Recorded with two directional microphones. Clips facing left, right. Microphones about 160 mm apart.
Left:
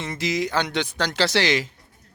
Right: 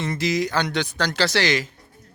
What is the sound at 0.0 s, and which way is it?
Speech, 20° left (ahead or behind).